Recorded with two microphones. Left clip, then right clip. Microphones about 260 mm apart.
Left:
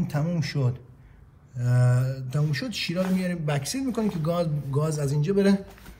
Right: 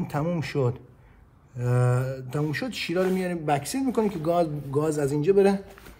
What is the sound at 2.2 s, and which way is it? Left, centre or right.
A man's voice, right.